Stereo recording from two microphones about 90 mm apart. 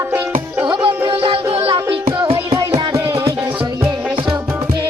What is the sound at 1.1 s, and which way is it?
Music, 80° right.